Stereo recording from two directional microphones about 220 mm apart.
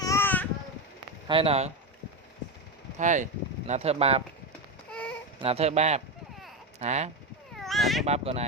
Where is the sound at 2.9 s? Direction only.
35° right (ahead or behind).